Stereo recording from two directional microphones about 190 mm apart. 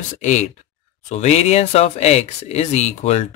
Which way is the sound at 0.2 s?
40° left (ahead or behind).